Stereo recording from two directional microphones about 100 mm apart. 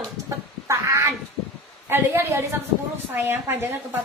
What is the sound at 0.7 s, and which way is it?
Cat, 30° right (ahead or behind).